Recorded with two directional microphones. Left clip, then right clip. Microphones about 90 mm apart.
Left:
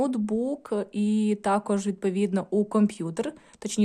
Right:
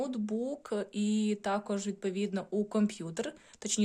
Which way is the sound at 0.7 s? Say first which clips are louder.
Left 6 dB; 20° left (ahead or behind).